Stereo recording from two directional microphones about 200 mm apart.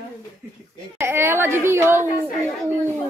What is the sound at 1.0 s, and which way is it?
A woman's voice, 10° right (ahead or behind).